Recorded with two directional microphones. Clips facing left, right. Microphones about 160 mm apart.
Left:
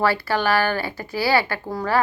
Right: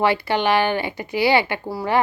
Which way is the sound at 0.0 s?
20° right (ahead or behind).